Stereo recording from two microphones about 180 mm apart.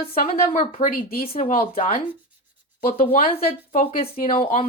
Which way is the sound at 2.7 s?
50° left (ahead or behind).